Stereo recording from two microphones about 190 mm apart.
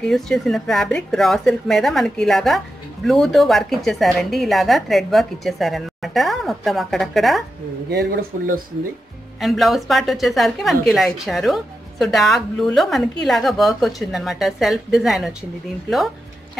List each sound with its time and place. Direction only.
0.1 s a woman's voice: centre (ahead or behind)
7.9 s speech: 55° right (ahead or behind)
9.4 s a woman's voice: centre (ahead or behind)